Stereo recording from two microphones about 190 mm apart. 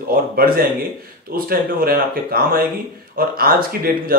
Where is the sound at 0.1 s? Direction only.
50° right (ahead or behind).